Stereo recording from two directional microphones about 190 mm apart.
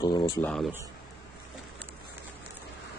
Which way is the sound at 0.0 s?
25° left (ahead or behind).